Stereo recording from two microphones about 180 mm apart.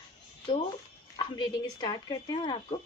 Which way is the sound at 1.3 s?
25° left (ahead or behind).